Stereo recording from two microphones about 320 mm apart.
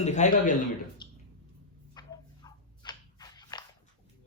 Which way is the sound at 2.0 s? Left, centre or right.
Centre.